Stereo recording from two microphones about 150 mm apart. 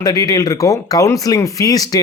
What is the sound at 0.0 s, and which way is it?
Speech, 25° left (ahead or behind).